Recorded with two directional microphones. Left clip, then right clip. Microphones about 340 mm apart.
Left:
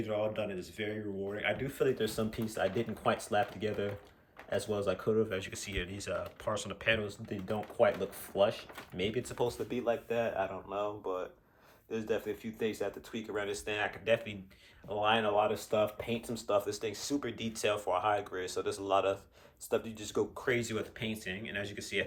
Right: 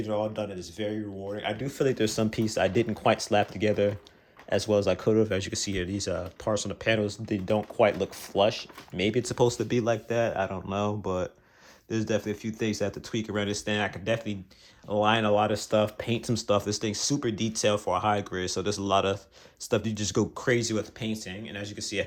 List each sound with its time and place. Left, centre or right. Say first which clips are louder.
0.0 s speech: right 4 dB; centre; by 10.6 s right
11.9 s speech: right 6 dB; right